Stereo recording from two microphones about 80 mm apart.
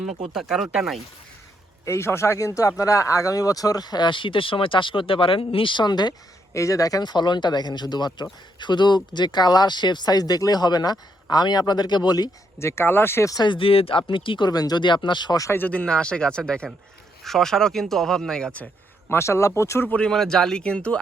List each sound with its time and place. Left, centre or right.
0.3 s speech: centre
1.8 s speech: left
6.5 s speech: left
7.0 s speech: left
12.5 s speech: left
13.4 s speech: left
14.5 s speech: left
14.8 s speech: left
15.5 s speech: centre
19.0 s speech: left
19.8 s speech: centre
20.1 s speech: centre